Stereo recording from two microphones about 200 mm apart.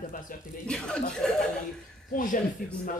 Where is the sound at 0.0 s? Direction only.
40° left (ahead or behind).